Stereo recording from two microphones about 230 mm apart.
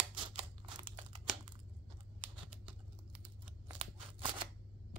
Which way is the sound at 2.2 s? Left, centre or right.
Right.